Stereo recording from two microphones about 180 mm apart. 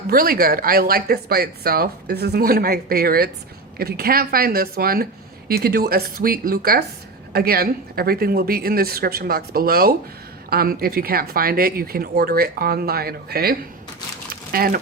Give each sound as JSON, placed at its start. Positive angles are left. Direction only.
{"t": 0.1, "sound": "speech", "side_deg": -55}